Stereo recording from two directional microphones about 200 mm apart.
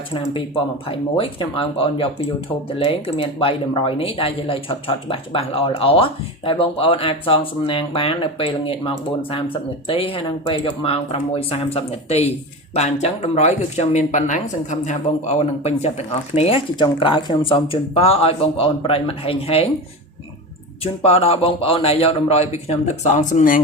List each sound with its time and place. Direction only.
0.9 s speech: 25° left (ahead or behind)
20.8 s a man's voice: 30° left (ahead or behind)